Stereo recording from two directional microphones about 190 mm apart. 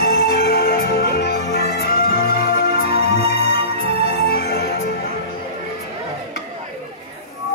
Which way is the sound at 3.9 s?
55° left (ahead or behind).